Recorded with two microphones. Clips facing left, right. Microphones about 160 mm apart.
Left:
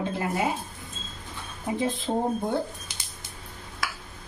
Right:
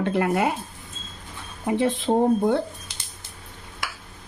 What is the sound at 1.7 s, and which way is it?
Speech, 70° right (ahead or behind).